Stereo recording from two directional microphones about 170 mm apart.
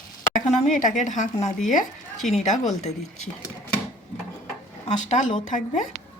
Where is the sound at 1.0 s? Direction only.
45° left (ahead or behind).